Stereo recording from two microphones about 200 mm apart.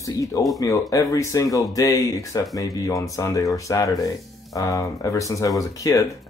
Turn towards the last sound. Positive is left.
turn(degrees=15)  # may be behind; listen again after turning